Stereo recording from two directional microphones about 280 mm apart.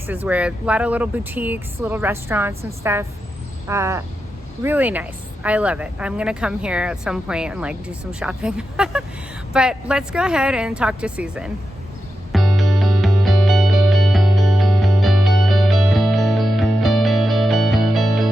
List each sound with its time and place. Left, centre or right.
0.1 s speech: centre
12.3 s music: centre